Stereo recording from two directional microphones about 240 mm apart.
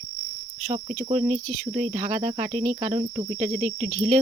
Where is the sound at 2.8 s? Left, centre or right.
Right.